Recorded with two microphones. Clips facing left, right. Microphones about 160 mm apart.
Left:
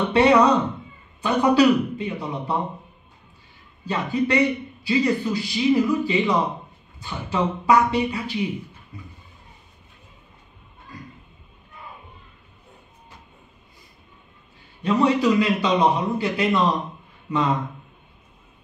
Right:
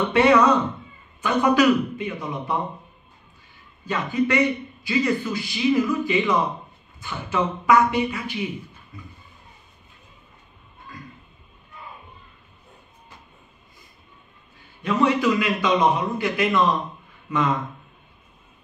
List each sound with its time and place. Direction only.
0.1 s a man's voice: 35° left (ahead or behind)
3.8 s a man's voice: 30° left (ahead or behind)
14.8 s a man's voice: 30° left (ahead or behind)